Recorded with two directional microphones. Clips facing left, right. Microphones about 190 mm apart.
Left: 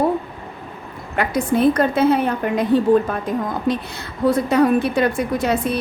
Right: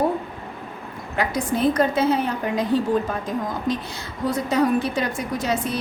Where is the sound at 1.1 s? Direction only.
60° left (ahead or behind).